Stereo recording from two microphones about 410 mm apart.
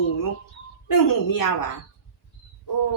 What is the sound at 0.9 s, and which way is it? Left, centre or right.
Speech, left.